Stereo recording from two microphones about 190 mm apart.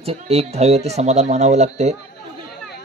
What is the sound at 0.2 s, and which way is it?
Speech, 35° right (ahead or behind).